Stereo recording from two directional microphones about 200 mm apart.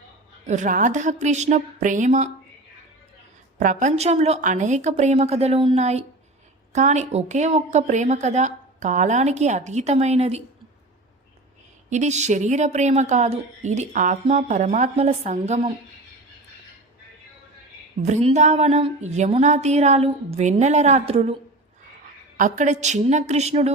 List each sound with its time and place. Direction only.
0.4 s a woman's voice: 35° right (ahead or behind)
3.6 s a woman's voice: 40° right (ahead or behind)
11.9 s a woman's voice: 35° right (ahead or behind)
18.0 s a woman's voice: 35° right (ahead or behind)
22.4 s a woman's voice: 40° right (ahead or behind)